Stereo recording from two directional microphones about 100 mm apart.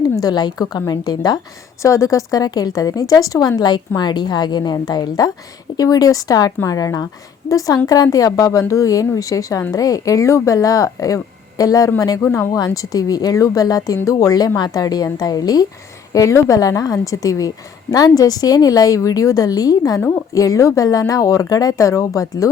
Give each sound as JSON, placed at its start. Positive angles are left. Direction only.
{"t": 0.0, "sound": "a woman's voice", "side_deg": 40}
{"t": 1.8, "sound": "a woman's voice", "side_deg": 30}